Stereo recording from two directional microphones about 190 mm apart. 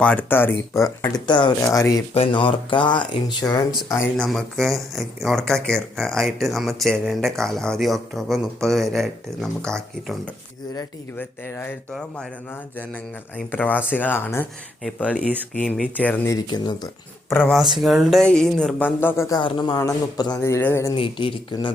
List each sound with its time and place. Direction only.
0.0 s speech: 5° left (ahead or behind)
1.1 s speech: 25° left (ahead or behind)
2.1 s speech: 30° left (ahead or behind)
4.0 s speech: centre (ahead or behind)
13.3 s speech: 10° left (ahead or behind)
17.8 s speech: centre (ahead or behind)
19.4 s speech: 25° left (ahead or behind)
20.9 s speech: 25° left (ahead or behind)